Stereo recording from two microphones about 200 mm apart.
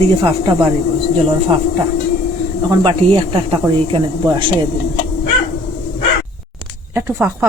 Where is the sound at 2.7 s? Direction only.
20° right (ahead or behind).